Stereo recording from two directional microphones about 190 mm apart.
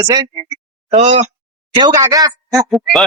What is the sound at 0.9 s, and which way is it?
Speech, 35° right (ahead or behind).